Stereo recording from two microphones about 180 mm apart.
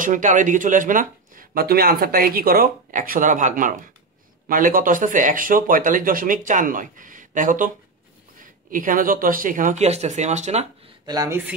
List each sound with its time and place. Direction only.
0.0 s speech: 45° right (ahead or behind)
11.1 s speech: 20° right (ahead or behind)